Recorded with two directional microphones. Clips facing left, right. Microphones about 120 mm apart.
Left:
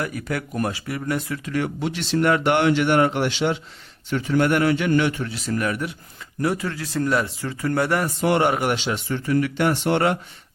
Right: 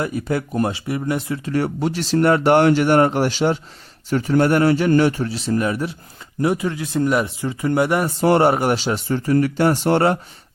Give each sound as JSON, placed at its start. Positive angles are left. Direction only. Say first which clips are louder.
{"t": 0.0, "sound": "a man's voice", "louder": "right 5 dB", "side_deg": -25}
{"t": 1.5, "sound": "a man's voice", "louder": "right 5 dB", "side_deg": -35}
{"t": 8.2, "sound": "speech", "louder": "right 5 dB", "side_deg": -35}